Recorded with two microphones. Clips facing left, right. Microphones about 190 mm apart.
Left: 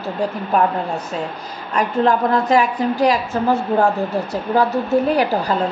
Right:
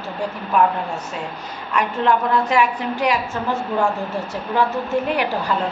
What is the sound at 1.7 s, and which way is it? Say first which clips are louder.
A woman's voice: left 2 dB; 40° left (ahead or behind).